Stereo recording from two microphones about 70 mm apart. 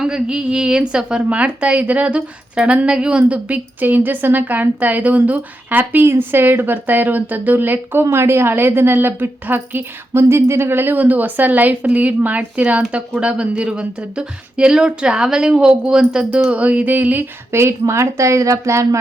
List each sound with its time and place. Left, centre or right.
0.0 s a woman's voice: centre
16.3 s a woman's voice: right
17.5 s speech: right